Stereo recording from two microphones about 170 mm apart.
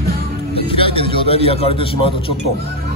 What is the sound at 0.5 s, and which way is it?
A man's voice, 35° left (ahead or behind).